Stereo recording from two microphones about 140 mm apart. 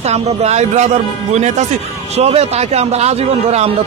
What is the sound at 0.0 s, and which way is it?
A man's voice, 50° right (ahead or behind).